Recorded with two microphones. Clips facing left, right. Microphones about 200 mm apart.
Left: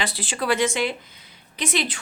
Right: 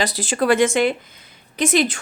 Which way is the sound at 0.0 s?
40° right (ahead or behind).